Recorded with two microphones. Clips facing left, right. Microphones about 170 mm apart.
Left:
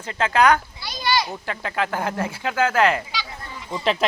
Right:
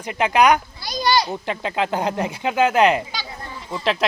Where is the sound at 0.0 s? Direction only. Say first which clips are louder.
Right 2 dB; 15° right (ahead or behind).